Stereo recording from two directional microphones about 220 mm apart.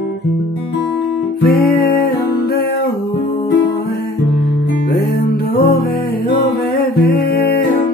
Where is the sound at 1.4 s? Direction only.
40° left (ahead or behind).